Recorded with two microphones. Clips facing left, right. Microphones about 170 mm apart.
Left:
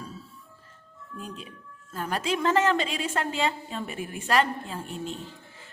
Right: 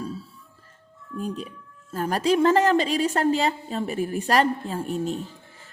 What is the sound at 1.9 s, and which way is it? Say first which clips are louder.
A woman's voice: right 7 dB; 40° right (ahead or behind).